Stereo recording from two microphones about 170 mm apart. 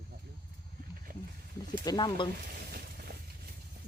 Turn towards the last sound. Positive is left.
turn(degrees=-65)  # may be behind; listen again after turning